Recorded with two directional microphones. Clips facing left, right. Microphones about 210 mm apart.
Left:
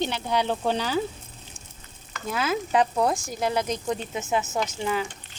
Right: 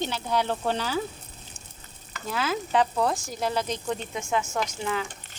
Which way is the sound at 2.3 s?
10° left (ahead or behind).